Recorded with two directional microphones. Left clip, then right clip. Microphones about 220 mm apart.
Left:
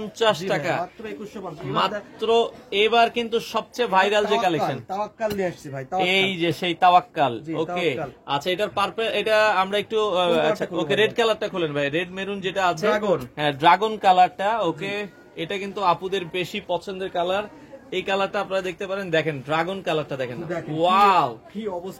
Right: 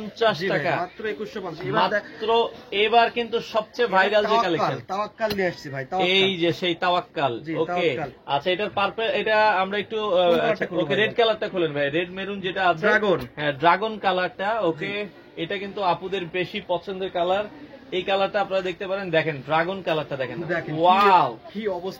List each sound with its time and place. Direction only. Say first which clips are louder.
0.0 s a man's voice: left 1 dB; 55° left (ahead or behind)
4.6 s speech: right 1 dB; 15° left (ahead or behind)
6.0 s a man's voice: right 1 dB; 50° left (ahead or behind)
12.8 s speech: right 1 dB; 10° left (ahead or behind)
13.4 s speech: left 4 dB; 55° left (ahead or behind)
17.9 s a man's voice: right 1 dB; 55° left (ahead or behind)